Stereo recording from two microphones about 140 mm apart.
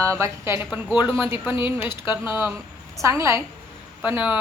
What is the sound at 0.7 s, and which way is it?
Speech, 10° right (ahead or behind).